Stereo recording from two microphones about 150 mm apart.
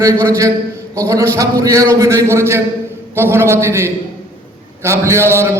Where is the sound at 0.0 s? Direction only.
20° right (ahead or behind).